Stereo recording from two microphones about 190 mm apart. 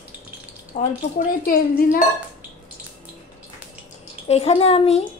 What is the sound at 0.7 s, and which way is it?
Speech, 30° left (ahead or behind).